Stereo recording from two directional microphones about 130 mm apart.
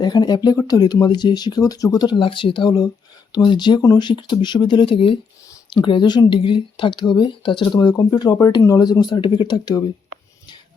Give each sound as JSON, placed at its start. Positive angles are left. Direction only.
{"t": 0.0, "sound": "speech", "side_deg": 30}